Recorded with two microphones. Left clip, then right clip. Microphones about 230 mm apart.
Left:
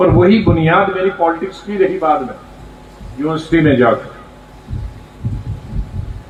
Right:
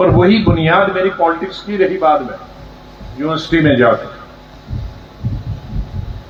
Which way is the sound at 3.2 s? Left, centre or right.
Right.